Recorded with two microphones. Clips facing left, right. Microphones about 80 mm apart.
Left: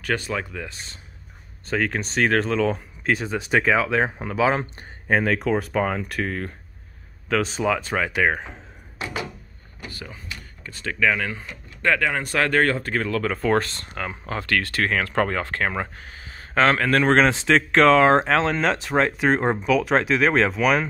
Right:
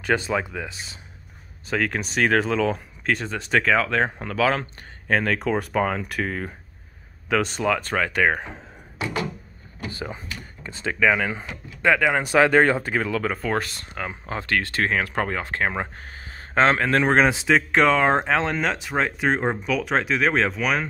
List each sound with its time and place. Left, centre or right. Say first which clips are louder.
0.0 s speech: right 3 dB; right
0.3 s speech: right 3 dB; centre
1.7 s speech: even; centre
9.8 s speech: right 5 dB; right
16.0 s a sound: right 1 dB; right
16.6 s speech: left 1 dB; right; by 20.8 s centre